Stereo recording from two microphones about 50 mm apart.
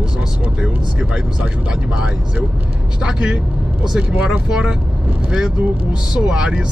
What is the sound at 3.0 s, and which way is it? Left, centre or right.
Speech, centre.